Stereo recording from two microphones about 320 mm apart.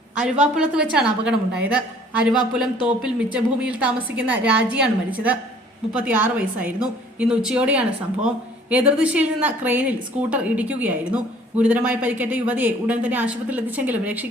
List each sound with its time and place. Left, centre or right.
0.5 s a woman's voice: centre